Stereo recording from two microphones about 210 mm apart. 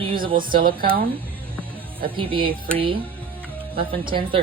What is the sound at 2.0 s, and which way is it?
Speech, 25° right (ahead or behind).